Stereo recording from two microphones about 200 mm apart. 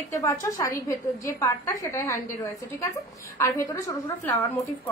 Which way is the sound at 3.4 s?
15° left (ahead or behind).